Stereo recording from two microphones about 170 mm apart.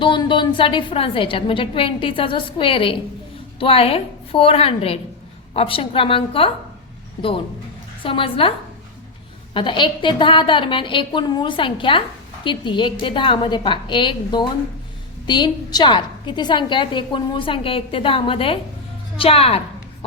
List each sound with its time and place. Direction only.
0.0 s a woman's voice: 30° left (ahead or behind)
9.6 s a woman's voice: 30° left (ahead or behind)
19.1 s a sound: 35° left (ahead or behind)